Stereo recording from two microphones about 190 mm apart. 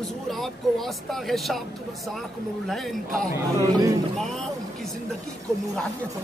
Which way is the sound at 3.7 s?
20° right (ahead or behind).